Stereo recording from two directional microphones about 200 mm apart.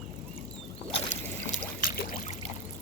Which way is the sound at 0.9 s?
30° left (ahead or behind).